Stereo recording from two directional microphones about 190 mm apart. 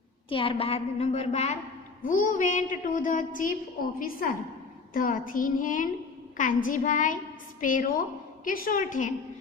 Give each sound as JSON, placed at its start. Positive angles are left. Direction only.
{"t": 0.3, "sound": "a woman's voice", "side_deg": 25}